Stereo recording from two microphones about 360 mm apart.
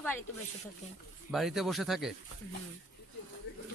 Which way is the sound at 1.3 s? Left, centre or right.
Centre.